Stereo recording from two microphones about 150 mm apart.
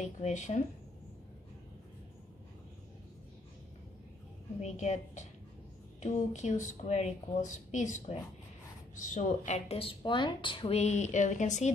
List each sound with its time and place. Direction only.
0.2 s speech: 50° left (ahead or behind)
4.6 s a woman's voice: 50° left (ahead or behind); by 10.8 s 35° left (ahead or behind)
10.8 s speech: 50° left (ahead or behind)